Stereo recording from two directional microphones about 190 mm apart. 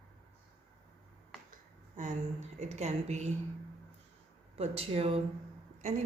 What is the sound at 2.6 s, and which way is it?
Speech, 35° right (ahead or behind).